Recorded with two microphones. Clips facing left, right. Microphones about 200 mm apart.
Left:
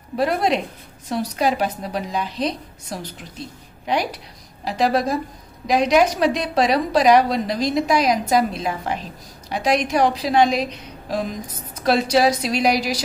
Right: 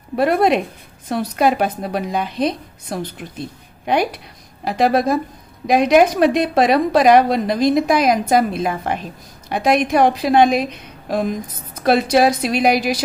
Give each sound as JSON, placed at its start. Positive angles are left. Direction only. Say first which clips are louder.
{"t": 0.1, "sound": "a woman's voice", "louder": "right 5 dB", "side_deg": -55}